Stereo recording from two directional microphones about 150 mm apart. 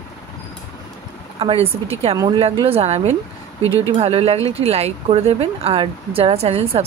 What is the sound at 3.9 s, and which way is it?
Speech, 40° right (ahead or behind).